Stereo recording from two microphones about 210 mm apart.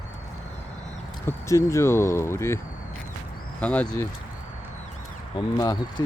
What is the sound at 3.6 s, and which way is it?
Speech, 5° left (ahead or behind).